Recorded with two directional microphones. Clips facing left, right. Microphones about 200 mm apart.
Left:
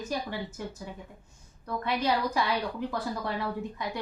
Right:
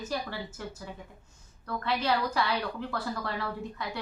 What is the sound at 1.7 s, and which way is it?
A woman's voice, 15° left (ahead or behind).